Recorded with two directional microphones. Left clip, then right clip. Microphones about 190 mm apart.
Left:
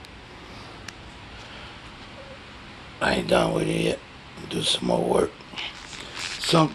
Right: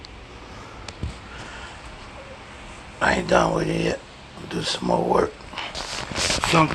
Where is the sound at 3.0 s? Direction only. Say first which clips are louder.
Right 3 dB; 10° left (ahead or behind).